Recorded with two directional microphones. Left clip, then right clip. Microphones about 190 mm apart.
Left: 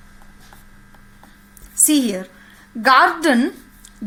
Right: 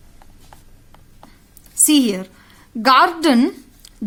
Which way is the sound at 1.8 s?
25° right (ahead or behind).